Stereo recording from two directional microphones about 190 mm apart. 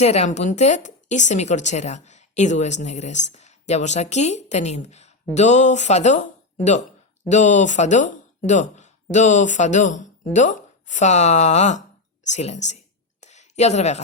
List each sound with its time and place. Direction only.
0.0 s speech: 35° left (ahead or behind)
7.3 s speech: 40° left (ahead or behind)
12.3 s a sound: 35° left (ahead or behind)